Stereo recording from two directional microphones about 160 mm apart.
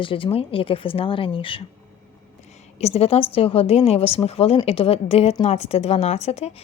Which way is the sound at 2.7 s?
40° left (ahead or behind).